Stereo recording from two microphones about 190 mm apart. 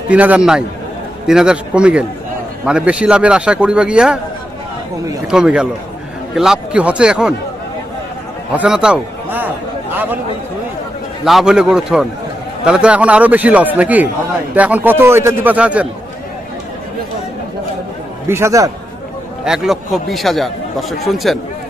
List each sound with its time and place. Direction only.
0.1 s a man's voice: 5° right (ahead or behind)
5.3 s a man's voice: 5° right (ahead or behind)
8.5 s a man's voice: 5° right (ahead or behind)
11.2 s a man's voice: centre (ahead or behind)
18.3 s a man's voice: 15° right (ahead or behind)
19.4 s a man's voice: 5° right (ahead or behind)